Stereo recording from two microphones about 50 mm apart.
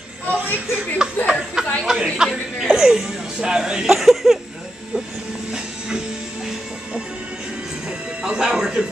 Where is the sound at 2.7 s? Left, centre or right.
Centre.